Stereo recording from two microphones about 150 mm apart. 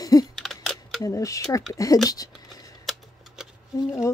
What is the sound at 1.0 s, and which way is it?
Speech, 20° left (ahead or behind).